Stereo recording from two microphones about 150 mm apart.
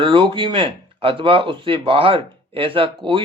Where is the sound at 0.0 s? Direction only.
35° right (ahead or behind).